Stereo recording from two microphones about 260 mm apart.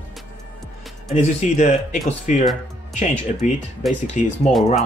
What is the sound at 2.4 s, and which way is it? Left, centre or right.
Music, centre.